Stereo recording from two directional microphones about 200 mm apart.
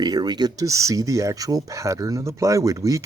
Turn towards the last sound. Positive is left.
turn(degrees=-15)  # may be behind; listen again after turning